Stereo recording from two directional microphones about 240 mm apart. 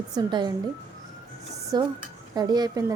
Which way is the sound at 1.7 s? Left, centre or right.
Centre.